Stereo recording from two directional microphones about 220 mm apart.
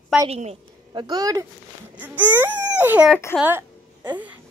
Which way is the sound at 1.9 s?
5° right (ahead or behind).